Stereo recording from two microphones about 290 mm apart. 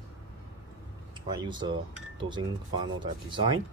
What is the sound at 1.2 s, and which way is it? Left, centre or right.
Speech, centre.